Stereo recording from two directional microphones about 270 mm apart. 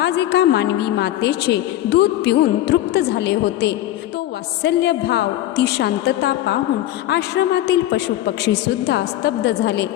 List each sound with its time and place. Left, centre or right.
0.0 s a woman's voice: left